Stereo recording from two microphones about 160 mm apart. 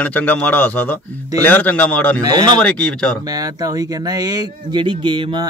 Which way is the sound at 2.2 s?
25° right (ahead or behind).